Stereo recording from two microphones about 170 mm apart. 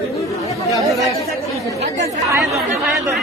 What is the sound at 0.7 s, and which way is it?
Speech, 20° right (ahead or behind).